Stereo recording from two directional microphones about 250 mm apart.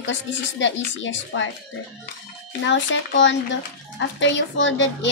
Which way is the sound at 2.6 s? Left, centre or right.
Left.